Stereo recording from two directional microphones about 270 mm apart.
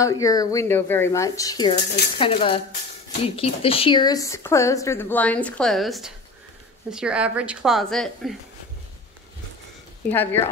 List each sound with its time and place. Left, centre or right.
0.0 s a woman's voice: centre
10.0 s speech: centre